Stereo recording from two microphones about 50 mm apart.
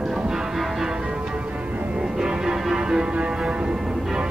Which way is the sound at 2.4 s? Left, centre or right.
Centre.